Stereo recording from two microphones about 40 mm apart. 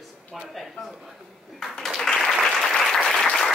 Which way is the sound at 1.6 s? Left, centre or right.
Centre.